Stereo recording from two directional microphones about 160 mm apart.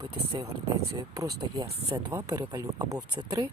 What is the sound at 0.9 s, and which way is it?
Speech, 20° right (ahead or behind).